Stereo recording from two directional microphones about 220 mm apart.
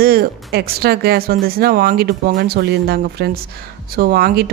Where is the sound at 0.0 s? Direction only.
45° right (ahead or behind).